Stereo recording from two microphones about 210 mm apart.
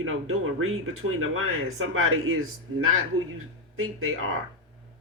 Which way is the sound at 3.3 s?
80° right.